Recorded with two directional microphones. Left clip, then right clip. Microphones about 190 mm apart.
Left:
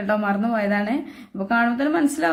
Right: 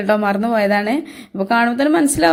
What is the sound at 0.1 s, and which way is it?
A woman's voice, 40° right (ahead or behind).